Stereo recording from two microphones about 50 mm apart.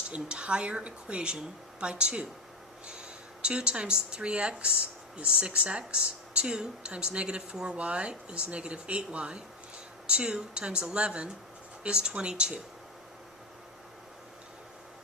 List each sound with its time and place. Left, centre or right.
0.1 s speech: right